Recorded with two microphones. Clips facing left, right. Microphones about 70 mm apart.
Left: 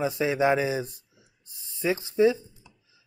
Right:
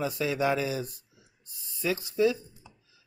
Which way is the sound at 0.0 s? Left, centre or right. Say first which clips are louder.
Left 4 dB; left.